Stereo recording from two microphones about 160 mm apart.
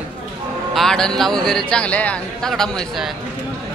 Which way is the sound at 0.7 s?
5° left (ahead or behind).